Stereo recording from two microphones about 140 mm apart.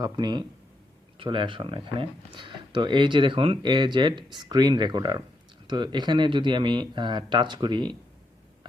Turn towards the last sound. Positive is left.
turn(degrees=-30)  # may be behind; listen again after turning